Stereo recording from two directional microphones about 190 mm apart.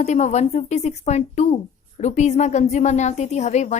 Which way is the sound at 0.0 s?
35° left (ahead or behind).